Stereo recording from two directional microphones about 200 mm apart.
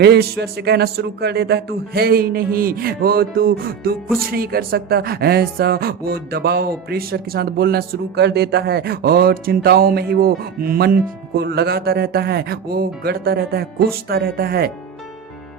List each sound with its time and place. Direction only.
0.0 s speech: 55° right (ahead or behind)